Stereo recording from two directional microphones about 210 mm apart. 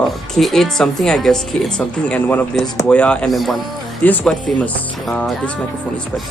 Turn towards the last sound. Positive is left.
turn(degrees=5)  # may be behind; listen again after turning